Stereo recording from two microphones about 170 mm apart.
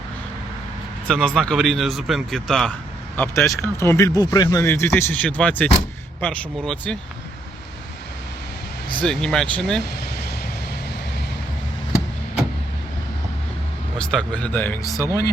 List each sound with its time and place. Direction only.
1.0 s speech: 5° left (ahead or behind)
3.2 s speech: 15° left (ahead or behind)
9.0 s speech: 5° left (ahead or behind)
14.0 s speech: 5° left (ahead or behind)